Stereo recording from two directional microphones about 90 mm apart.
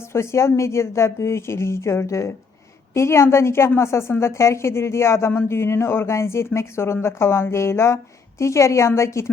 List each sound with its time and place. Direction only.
0.1 s speech: 30° left (ahead or behind)